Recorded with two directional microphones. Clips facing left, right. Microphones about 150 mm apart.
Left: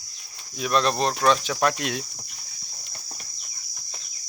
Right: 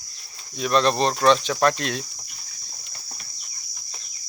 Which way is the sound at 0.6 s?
5° left (ahead or behind).